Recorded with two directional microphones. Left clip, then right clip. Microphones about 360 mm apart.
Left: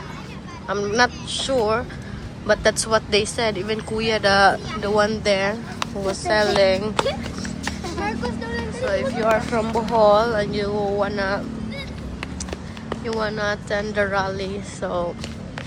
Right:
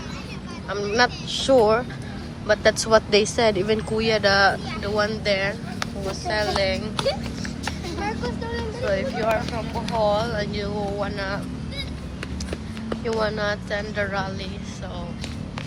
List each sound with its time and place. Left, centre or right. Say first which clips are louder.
0.7 s speech: left 2 dB; centre
7.6 s music: left 2 dB; left
8.9 s speech: left 3 dB; centre
13.1 s speech: left 1 dB; centre